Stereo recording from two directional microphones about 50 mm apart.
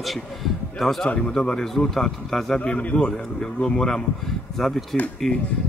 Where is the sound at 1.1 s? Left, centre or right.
Centre.